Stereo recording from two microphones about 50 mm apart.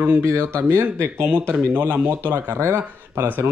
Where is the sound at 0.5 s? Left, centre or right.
Right.